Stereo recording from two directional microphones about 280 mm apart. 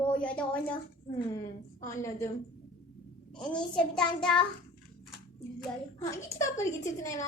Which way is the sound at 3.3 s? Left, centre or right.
Centre.